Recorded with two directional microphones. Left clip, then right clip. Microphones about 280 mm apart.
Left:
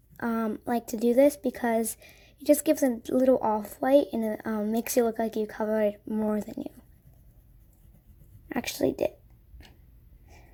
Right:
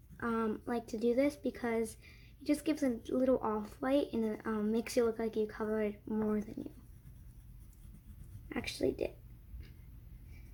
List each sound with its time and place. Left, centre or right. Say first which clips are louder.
0.2 s a woman's voice: left 5 dB; left
8.4 s a woman's voice: left 7 dB; left